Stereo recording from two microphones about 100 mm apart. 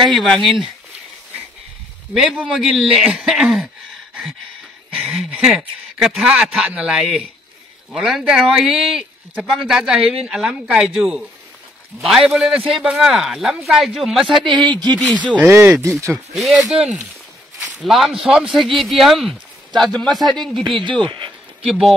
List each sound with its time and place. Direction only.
0.0 s a man's voice: centre (ahead or behind)
2.1 s a man's voice: 5° right (ahead or behind)
4.9 s a sound: 5° right (ahead or behind)
5.3 s a man's voice: 5° right (ahead or behind)
14.5 s speech: 10° left (ahead or behind)
15.3 s speech: 20° right (ahead or behind)
16.3 s a man's voice: centre (ahead or behind)
21.0 s speech: 55° right (ahead or behind)
21.6 s a man's voice: centre (ahead or behind)